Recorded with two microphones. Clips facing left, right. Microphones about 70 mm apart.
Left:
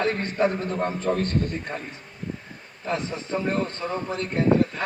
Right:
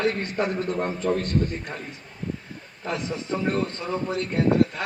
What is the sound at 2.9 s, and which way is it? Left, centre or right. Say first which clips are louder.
A man's voice: left 1 dB; left.